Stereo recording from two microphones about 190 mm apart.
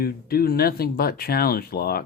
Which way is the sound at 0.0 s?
55° left (ahead or behind).